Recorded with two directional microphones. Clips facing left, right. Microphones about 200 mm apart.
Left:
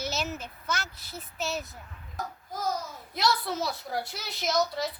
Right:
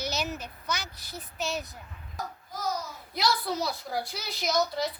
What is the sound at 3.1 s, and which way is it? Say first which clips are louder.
Speech: even; centre (ahead or behind).